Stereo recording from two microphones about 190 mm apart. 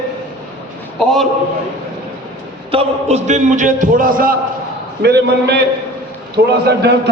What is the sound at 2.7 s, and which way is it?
A man's voice, 35° right (ahead or behind).